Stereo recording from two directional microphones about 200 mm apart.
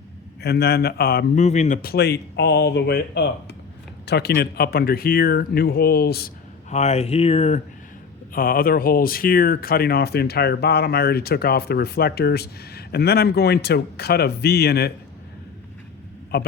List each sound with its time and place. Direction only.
0.4 s speech: 55° left (ahead or behind)
1.4 s speech: 35° left (ahead or behind); by 6.3 s 50° left (ahead or behind)
6.7 s speech: 35° left (ahead or behind)
8.3 s speech: 45° left (ahead or behind)
16.3 s speech: 50° left (ahead or behind)